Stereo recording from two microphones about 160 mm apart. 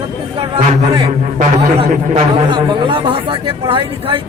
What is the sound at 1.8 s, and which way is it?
Speech, 40° right (ahead or behind).